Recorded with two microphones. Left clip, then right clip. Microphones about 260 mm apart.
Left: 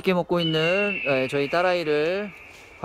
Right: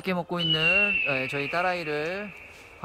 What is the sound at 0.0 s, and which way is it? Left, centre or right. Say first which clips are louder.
Speech: left 6 dB; left.